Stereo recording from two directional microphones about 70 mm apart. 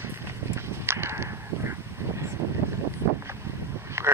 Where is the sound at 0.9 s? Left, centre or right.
Right.